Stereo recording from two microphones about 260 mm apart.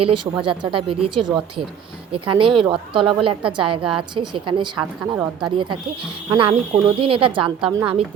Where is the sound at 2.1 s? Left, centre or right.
Centre.